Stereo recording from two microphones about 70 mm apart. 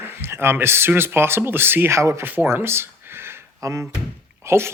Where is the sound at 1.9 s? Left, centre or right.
Right.